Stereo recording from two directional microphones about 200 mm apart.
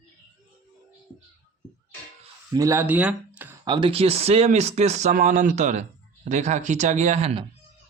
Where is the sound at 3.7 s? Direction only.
25° right (ahead or behind).